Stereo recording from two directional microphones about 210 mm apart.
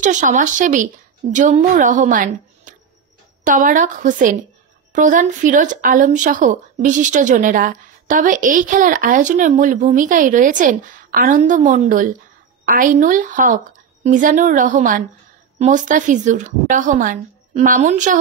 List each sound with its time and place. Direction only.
0.0 s speech: 35° right (ahead or behind)